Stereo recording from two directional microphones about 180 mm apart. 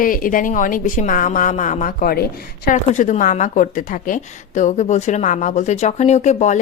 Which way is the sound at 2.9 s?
45° left (ahead or behind).